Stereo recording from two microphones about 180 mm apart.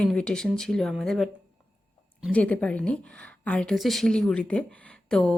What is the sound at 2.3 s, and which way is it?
A woman's voice, 5° left (ahead or behind).